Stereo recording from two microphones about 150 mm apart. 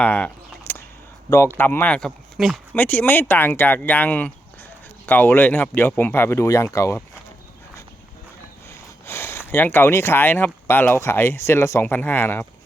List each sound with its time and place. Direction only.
0.0 s speech: 10° left (ahead or behind)
0.7 s a sound: 15° left (ahead or behind)
1.5 s speech: 15° left (ahead or behind)
2.7 s speech: 10° left (ahead or behind)
9.0 s a sound: 15° left (ahead or behind)
9.5 s speech: 15° left (ahead or behind)